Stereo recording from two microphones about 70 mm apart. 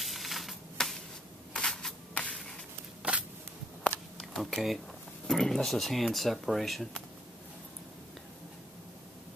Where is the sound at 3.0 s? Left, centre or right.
Centre.